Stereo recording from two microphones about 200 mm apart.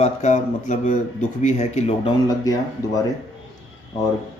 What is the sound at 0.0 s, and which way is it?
Speech, 35° left (ahead or behind).